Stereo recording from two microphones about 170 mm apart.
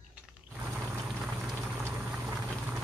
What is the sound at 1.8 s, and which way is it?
Boiling, 15° right (ahead or behind).